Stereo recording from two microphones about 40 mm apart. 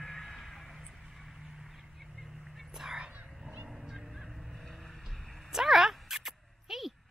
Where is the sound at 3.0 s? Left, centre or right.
Right.